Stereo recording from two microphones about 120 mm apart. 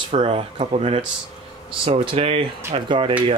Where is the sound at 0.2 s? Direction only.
50° right (ahead or behind).